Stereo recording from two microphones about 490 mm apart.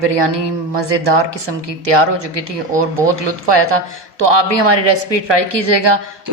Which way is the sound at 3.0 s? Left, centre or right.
Right.